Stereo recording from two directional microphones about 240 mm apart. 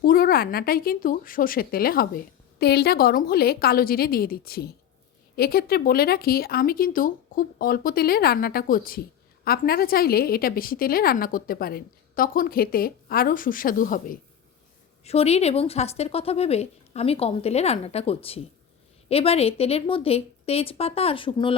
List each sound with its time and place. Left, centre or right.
0.0 s speech: left